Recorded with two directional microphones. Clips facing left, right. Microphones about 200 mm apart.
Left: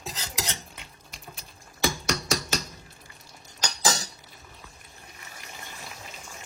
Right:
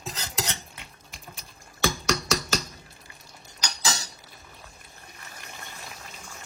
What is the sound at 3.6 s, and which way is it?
Rodents, 45° left (ahead or behind).